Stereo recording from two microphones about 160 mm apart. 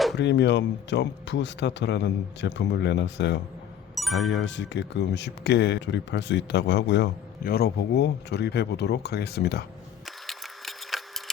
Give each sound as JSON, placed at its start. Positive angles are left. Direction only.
{"t": 0.2, "sound": "speech", "side_deg": 90}
{"t": 3.9, "sound": "music", "side_deg": 0}
{"t": 4.7, "sound": "speech", "side_deg": 90}
{"t": 10.1, "sound": "a sound", "side_deg": 0}